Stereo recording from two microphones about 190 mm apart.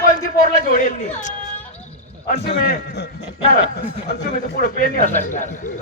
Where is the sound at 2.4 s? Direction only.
60° left (ahead or behind).